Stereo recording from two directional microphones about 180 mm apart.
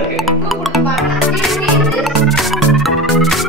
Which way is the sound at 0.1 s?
Centre (ahead or behind).